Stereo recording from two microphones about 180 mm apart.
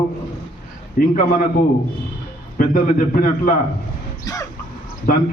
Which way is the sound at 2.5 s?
50° left (ahead or behind).